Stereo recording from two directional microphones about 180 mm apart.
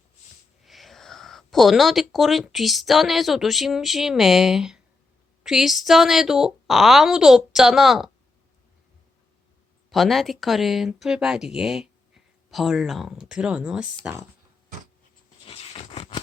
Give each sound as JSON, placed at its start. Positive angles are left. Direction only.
{"t": 0.6, "sound": "speech", "side_deg": 0}
{"t": 9.9, "sound": "speech", "side_deg": 0}
{"t": 15.4, "sound": "a sound", "side_deg": 35}